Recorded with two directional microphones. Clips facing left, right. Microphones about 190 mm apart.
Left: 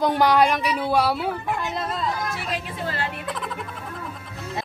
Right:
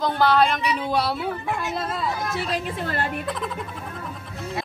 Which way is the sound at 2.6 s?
50° right (ahead or behind).